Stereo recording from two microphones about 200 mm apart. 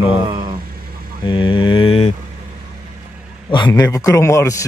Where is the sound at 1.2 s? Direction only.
25° left (ahead or behind).